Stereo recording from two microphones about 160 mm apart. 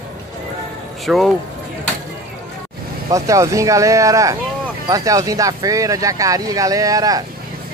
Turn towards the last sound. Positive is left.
turn(degrees=-20)  # may be behind; listen again after turning